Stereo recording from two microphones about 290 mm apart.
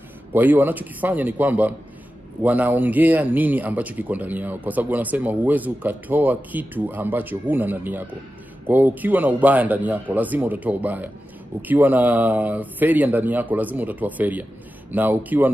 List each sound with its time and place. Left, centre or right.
0.3 s speech: centre